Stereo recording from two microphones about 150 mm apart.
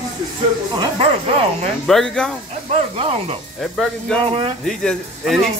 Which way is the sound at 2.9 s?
40° right (ahead or behind).